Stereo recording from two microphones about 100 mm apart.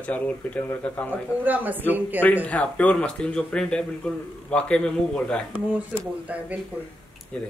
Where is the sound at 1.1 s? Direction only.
15° right (ahead or behind).